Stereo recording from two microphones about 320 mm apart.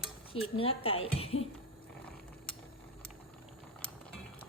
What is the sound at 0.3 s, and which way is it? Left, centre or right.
Speech, centre.